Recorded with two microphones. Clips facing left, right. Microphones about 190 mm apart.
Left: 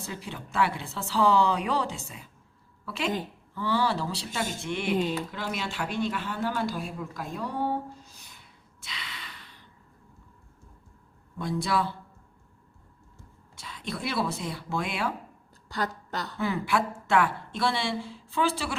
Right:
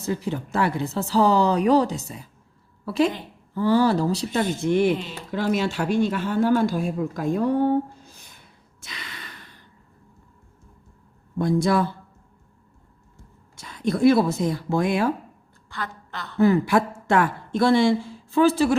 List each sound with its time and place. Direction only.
0.0 s a woman's voice: 40° right (ahead or behind)
4.9 s speech: 45° left (ahead or behind)
5.3 s speech: 45° right (ahead or behind)
8.8 s sigh: 45° right (ahead or behind)
11.3 s speech: 45° right (ahead or behind)
13.6 s speech: 45° right (ahead or behind)
15.7 s a woman's voice: 40° left (ahead or behind)
16.4 s speech: 45° right (ahead or behind)